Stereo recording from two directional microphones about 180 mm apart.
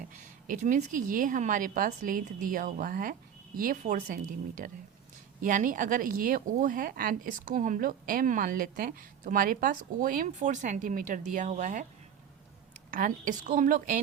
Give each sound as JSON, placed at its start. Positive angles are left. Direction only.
{"t": 0.2, "sound": "speech", "side_deg": -45}
{"t": 12.9, "sound": "speech", "side_deg": -50}